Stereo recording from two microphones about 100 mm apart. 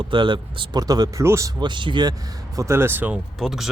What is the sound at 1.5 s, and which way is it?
Speech, 50° right (ahead or behind).